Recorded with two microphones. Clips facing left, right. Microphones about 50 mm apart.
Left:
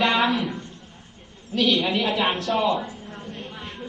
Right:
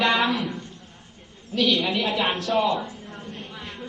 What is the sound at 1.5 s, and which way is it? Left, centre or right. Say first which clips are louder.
Speech: left 1 dB; centre.